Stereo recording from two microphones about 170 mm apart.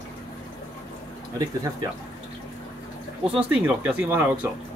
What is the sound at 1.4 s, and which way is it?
Speech, 20° right (ahead or behind).